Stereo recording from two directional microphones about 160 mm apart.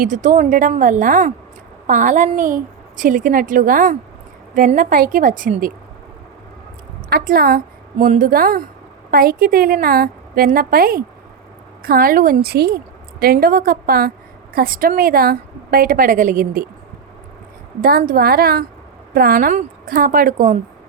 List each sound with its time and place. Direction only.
0.0 s a woman's voice: 55° right (ahead or behind)
7.1 s a woman's voice: 65° right (ahead or behind)
17.7 s a woman's voice: 65° right (ahead or behind)